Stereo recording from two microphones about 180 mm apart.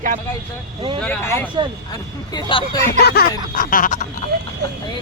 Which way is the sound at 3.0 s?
65° left (ahead or behind).